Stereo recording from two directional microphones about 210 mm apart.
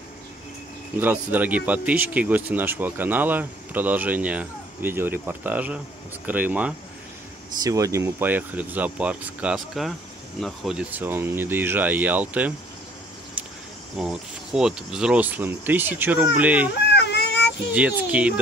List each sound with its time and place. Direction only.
0.9 s speech: 10° right (ahead or behind)
13.9 s speech: centre (ahead or behind)
16.9 s a sound: 55° left (ahead or behind)
17.7 s speech: 5° right (ahead or behind)